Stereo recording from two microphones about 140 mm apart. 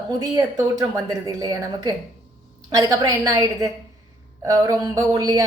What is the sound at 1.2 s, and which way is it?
A woman's voice, 25° right (ahead or behind).